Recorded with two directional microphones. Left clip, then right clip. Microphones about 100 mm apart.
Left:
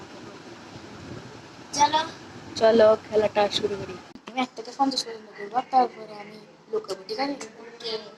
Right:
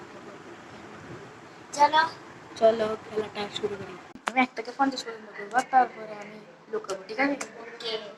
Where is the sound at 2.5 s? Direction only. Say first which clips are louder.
Left 6 dB; 45° left (ahead or behind).